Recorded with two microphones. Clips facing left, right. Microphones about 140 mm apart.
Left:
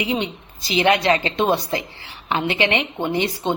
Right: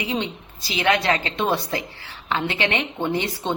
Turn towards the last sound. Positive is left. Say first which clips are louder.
# left 2 dB
turn(degrees=15)  # may be behind; listen again after turning